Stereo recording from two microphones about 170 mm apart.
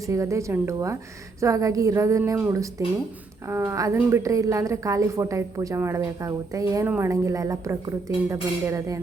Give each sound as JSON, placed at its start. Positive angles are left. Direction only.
{"t": 0.1, "sound": "a woman's voice", "side_deg": -20}